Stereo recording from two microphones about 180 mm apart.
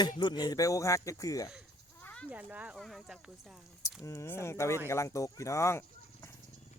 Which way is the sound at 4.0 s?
15° left (ahead or behind).